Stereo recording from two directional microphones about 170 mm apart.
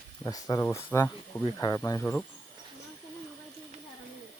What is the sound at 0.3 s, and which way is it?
Speech, 20° left (ahead or behind).